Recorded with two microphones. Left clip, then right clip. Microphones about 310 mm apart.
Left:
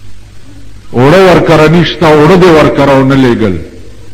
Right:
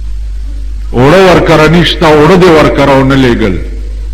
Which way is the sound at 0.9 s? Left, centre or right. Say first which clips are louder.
Even; right.